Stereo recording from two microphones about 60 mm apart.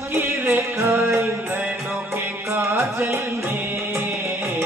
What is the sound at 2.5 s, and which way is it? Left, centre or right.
Music, right.